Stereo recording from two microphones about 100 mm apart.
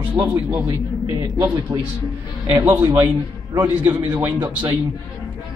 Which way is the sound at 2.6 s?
25° right (ahead or behind).